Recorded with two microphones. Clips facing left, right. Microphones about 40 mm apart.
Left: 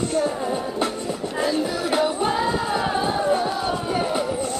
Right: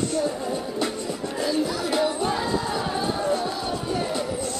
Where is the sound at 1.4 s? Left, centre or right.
Left.